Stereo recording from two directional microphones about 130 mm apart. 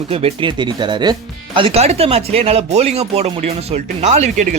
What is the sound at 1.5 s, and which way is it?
Speech, 45° right (ahead or behind).